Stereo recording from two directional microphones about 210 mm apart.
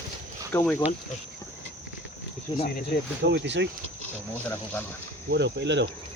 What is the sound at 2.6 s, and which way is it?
Speech, 45° left (ahead or behind).